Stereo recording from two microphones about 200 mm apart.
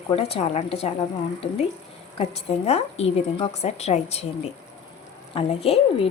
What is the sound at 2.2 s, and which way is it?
A woman's voice, 30° left (ahead or behind).